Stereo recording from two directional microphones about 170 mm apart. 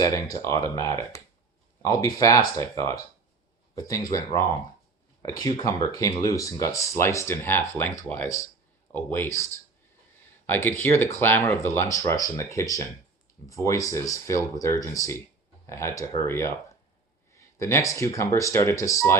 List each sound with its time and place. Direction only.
0.0 s speech: 20° left (ahead or behind)